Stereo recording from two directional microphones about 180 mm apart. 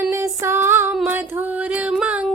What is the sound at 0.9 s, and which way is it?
Female singing, 10° right (ahead or behind).